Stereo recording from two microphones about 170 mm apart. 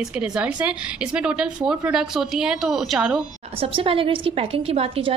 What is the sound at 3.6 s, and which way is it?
A woman's voice, 30° right (ahead or behind).